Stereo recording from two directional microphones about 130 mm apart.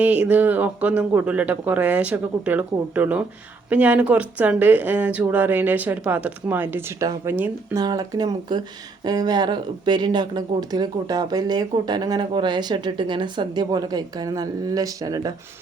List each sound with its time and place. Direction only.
0.0 s speech: 10° right (ahead or behind)
7.7 s speech: 30° right (ahead or behind)